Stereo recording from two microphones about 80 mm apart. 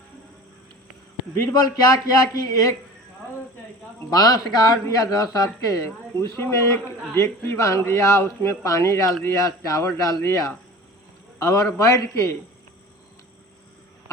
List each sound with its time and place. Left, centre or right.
1.6 s speech: left
4.1 s speech: left
6.3 s speech: left